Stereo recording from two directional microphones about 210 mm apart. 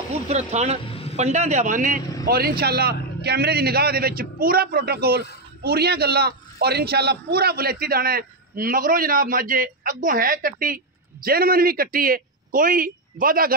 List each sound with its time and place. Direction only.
0.5 s a man's voice: 30° right (ahead or behind)
0.8 s a sound: 25° left (ahead or behind)
1.1 s a man's voice: 35° right (ahead or behind)